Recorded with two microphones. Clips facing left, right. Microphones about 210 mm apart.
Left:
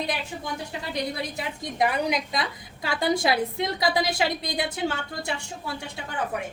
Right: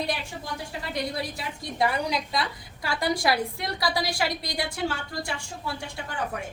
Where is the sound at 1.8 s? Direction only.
20° left (ahead or behind).